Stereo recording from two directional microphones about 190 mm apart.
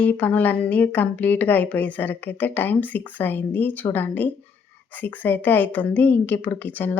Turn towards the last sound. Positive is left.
turn(degrees=10)  # may be behind; listen again after turning